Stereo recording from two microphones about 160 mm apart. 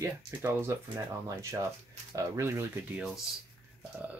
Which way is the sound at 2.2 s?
15° right (ahead or behind).